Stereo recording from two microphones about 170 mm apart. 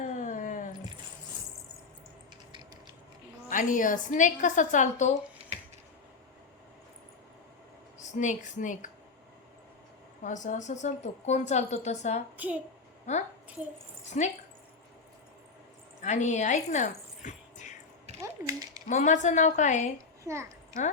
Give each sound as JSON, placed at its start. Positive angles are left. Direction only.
{"t": 0.0, "sound": "a sound", "side_deg": 50}
{"t": 3.5, "sound": "a woman's voice", "side_deg": 50}
{"t": 5.4, "sound": "finger snapping", "side_deg": -35}
{"t": 8.0, "sound": "a woman's voice", "side_deg": 45}
{"t": 10.2, "sound": "a woman's voice", "side_deg": 45}
{"t": 16.0, "sound": "speech", "side_deg": 45}
{"t": 18.2, "sound": "a sound", "side_deg": -20}
{"t": 18.9, "sound": "a woman's voice", "side_deg": 45}
{"t": 20.2, "sound": "a child's voice", "side_deg": -15}